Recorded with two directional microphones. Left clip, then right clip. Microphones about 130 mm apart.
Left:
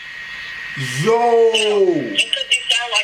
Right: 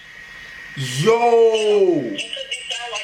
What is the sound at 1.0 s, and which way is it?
Speech, 5° right (ahead or behind).